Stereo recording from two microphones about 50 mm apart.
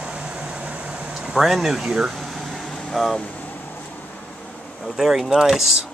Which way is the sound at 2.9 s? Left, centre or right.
Centre.